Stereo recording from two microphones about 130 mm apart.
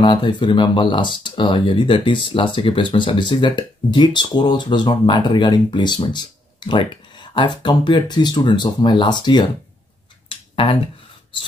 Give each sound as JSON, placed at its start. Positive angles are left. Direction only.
{"t": 0.0, "sound": "speech", "side_deg": 35}
{"t": 10.2, "sound": "finger snapping", "side_deg": 45}